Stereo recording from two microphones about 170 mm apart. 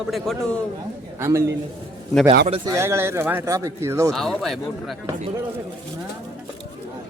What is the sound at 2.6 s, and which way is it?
Speech, 15° right (ahead or behind).